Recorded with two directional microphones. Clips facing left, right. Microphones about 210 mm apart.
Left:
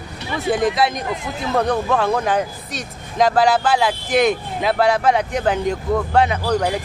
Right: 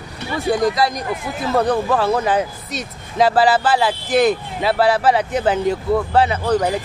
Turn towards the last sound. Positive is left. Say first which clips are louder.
# right 1 dB
turn(degrees=-5)  # may be behind; listen again after turning